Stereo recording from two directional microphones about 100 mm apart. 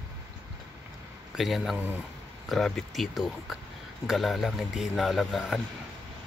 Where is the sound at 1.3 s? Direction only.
Centre (ahead or behind).